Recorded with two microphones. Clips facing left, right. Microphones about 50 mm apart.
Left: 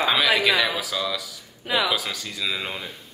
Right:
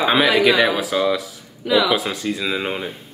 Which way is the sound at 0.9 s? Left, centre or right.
Right.